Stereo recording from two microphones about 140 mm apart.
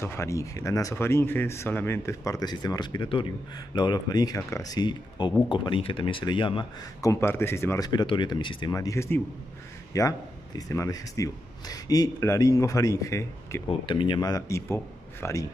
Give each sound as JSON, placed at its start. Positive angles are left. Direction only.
{"t": 0.0, "sound": "speech", "side_deg": 20}
{"t": 7.0, "sound": "speech", "side_deg": 20}
{"t": 7.9, "sound": "speech", "side_deg": 35}
{"t": 13.7, "sound": "speech", "side_deg": 40}